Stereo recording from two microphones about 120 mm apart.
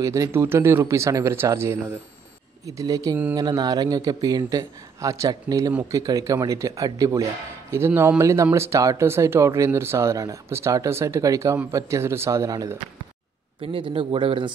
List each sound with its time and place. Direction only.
0.0 s a man's voice: 25° right (ahead or behind)
13.6 s a man's voice: 50° right (ahead or behind)